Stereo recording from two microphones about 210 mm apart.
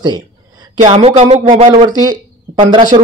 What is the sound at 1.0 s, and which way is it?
Speech, 30° right (ahead or behind).